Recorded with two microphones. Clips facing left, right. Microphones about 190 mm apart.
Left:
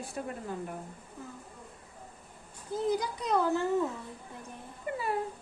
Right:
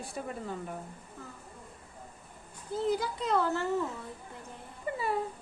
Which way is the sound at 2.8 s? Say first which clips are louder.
Even; 15° left (ahead or behind).